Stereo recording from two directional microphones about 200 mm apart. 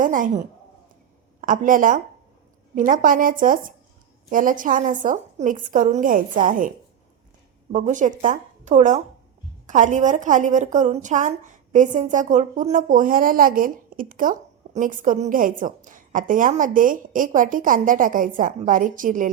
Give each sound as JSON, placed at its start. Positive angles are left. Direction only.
{"t": 0.0, "sound": "a woman's voice", "side_deg": -40}
{"t": 1.4, "sound": "a woman's voice", "side_deg": -40}
{"t": 7.7, "sound": "a woman's voice", "side_deg": -40}